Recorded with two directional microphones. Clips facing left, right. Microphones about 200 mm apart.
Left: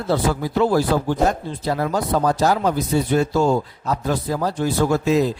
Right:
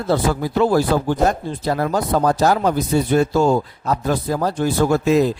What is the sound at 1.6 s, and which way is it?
Speech, 50° right (ahead or behind).